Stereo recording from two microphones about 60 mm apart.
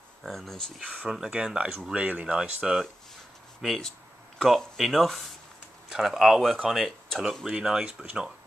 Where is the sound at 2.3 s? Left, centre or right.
Centre.